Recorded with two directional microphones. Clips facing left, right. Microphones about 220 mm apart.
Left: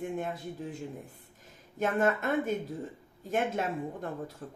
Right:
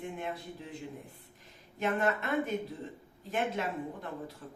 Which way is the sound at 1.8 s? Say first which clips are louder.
Left 3 dB; 45° left (ahead or behind).